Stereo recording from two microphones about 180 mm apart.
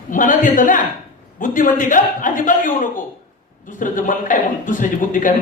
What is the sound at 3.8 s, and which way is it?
A man's voice, 45° left (ahead or behind).